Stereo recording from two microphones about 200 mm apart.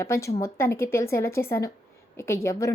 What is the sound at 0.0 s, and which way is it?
A woman's voice, 15° left (ahead or behind).